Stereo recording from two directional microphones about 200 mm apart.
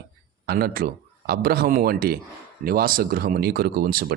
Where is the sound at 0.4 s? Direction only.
50° right (ahead or behind).